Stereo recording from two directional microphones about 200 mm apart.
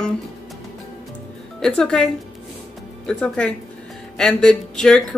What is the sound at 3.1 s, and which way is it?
Speech, 5° left (ahead or behind).